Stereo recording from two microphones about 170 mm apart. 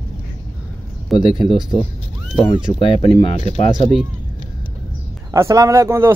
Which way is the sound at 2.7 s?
30° left (ahead or behind).